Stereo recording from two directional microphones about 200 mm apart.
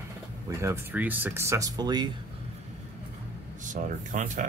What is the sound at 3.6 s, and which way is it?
Speech, 40° right (ahead or behind).